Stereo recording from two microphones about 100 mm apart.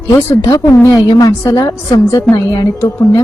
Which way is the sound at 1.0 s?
40° left (ahead or behind).